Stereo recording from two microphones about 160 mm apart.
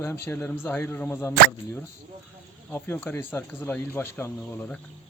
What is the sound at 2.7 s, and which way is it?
Speech, 15° left (ahead or behind).